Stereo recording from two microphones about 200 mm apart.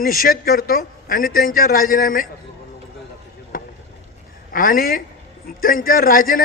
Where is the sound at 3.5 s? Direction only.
45° left (ahead or behind).